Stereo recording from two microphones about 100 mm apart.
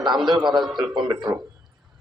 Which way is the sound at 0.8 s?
50° right (ahead or behind).